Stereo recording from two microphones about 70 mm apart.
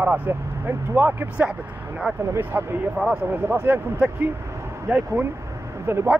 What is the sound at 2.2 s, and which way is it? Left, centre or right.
Speech, right.